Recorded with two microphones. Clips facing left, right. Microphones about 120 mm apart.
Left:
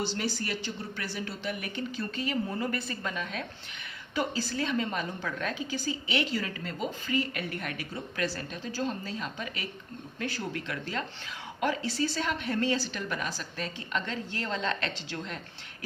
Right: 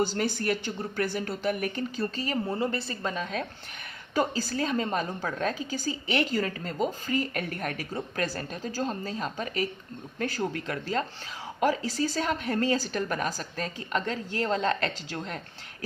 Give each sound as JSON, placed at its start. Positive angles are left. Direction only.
{"t": 0.0, "sound": "a woman's voice", "side_deg": -50}